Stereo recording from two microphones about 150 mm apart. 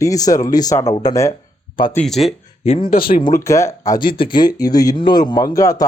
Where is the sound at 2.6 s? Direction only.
40° left (ahead or behind).